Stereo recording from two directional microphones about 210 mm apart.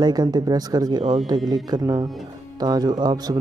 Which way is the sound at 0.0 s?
20° right (ahead or behind).